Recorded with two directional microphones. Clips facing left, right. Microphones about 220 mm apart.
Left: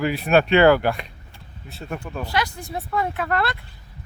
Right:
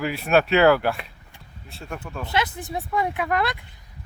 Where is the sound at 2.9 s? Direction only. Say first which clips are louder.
Even; 15° right (ahead or behind).